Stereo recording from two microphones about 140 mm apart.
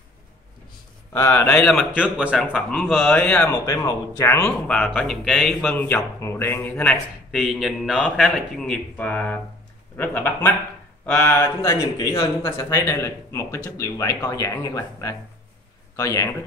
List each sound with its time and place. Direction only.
1.1 s speech: 15° left (ahead or behind)
1.6 s speech: centre (ahead or behind)
3.5 s speech: 25° left (ahead or behind)
7.3 s speech: 5° right (ahead or behind); by 11.4 s 10° left (ahead or behind)
11.4 s speech: 25° left (ahead or behind)